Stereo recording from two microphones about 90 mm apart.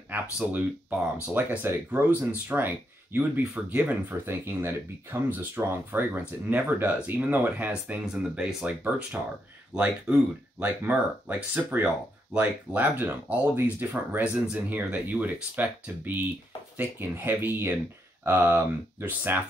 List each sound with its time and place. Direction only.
0.1 s speech: 20° right (ahead or behind)
8.1 s speech: 5° right (ahead or behind)
9.8 s speech: 15° right (ahead or behind)